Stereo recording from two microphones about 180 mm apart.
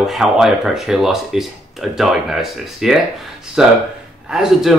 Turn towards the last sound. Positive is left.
turn(degrees=0)  # may be behind; listen again after turning